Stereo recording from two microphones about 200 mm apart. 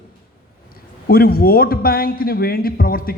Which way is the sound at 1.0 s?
50° left (ahead or behind).